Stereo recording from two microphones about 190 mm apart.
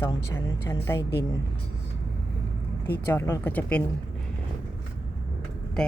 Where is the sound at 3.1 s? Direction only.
10° left (ahead or behind).